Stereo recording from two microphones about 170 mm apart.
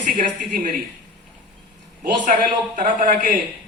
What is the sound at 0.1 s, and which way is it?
Speech, 55° right (ahead or behind).